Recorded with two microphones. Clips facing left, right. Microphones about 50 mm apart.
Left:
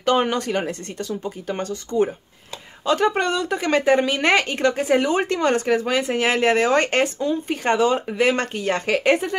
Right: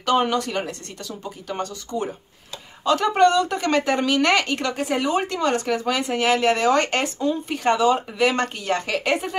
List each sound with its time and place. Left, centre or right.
0.0 s speech: left
2.8 s speech: left
3.1 s speech: centre; by 5.8 s left
5.9 s speech: centre